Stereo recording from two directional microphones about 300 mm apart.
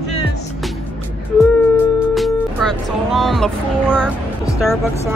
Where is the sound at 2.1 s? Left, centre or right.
Centre.